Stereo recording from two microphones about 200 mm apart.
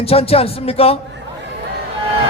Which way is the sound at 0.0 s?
30° left (ahead or behind).